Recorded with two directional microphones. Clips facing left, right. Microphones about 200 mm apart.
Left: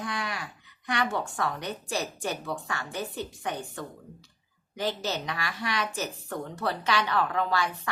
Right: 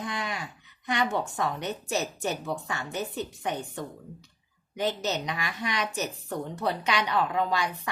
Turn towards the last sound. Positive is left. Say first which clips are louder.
# even
turn(degrees=-15)  # may be behind; listen again after turning